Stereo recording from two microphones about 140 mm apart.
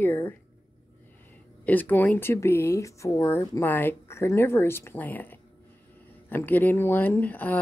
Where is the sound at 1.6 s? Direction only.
10° left (ahead or behind).